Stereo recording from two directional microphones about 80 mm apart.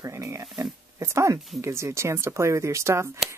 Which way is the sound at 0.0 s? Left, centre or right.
Right.